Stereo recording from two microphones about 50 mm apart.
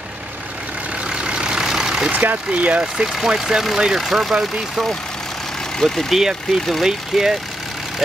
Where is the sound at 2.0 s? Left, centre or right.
Right.